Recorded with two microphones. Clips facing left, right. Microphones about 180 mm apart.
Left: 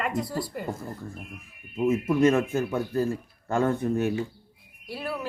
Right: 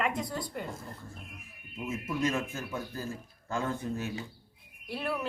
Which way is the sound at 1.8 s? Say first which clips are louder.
Left 11 dB; 55° left (ahead or behind).